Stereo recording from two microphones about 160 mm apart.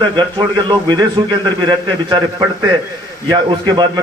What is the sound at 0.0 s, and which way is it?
A man's voice, 30° right (ahead or behind).